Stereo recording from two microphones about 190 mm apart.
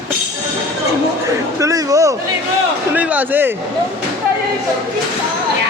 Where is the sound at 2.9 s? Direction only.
10° right (ahead or behind).